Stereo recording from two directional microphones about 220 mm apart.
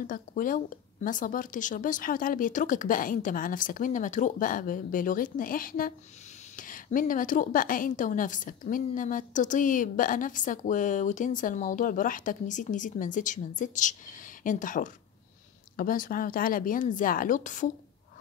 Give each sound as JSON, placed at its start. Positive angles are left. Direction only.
{"t": 0.0, "sound": "a woman's voice", "side_deg": 40}